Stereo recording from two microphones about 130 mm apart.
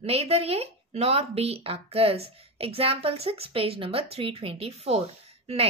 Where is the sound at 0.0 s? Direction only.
50° right (ahead or behind).